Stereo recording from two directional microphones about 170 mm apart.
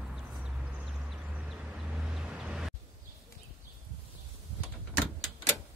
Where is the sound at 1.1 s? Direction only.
5° right (ahead or behind).